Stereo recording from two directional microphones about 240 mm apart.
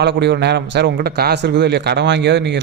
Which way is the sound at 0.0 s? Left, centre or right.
Right.